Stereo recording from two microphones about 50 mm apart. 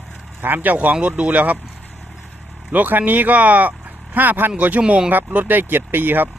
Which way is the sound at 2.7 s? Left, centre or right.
Right.